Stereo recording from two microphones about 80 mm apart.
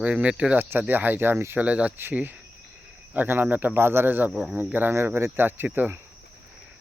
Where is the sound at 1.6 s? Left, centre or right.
Centre.